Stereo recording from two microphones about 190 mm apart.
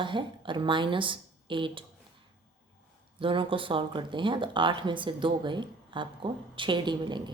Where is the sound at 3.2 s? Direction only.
25° right (ahead or behind).